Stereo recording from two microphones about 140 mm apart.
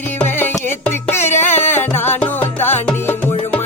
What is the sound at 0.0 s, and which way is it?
Music, 15° left (ahead or behind).